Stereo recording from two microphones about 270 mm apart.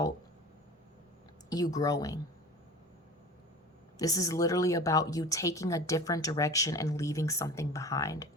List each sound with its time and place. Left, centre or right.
1.5 s speech: centre
3.9 s speech: centre